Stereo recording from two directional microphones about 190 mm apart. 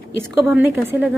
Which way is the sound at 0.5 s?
10° right (ahead or behind).